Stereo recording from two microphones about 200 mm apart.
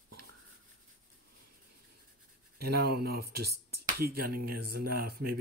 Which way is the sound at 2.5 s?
50° right (ahead or behind).